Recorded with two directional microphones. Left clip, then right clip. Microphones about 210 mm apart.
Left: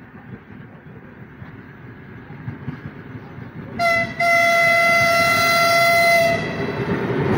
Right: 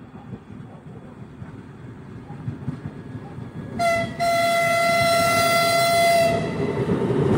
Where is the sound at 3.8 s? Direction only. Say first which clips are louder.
Left 3 dB; 20° right (ahead or behind).